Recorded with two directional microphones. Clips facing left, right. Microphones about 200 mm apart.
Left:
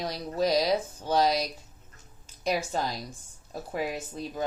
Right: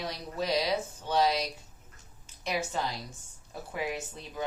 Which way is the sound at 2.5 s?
40° left (ahead or behind).